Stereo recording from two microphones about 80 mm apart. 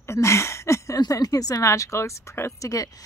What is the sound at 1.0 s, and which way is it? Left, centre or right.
Speech, left.